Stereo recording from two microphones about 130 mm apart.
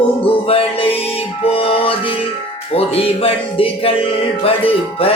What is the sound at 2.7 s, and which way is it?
Speech, 50° left (ahead or behind).